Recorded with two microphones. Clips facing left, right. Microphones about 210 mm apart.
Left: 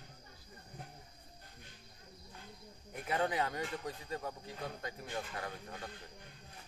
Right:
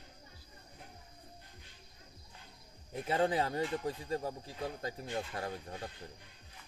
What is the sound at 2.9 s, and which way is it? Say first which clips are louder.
Speech: right 4 dB; 30° right (ahead or behind).